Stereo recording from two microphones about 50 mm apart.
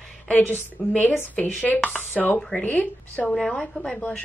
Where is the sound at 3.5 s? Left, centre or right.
Centre.